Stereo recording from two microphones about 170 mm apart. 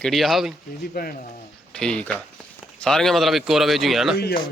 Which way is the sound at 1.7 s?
5° left (ahead or behind).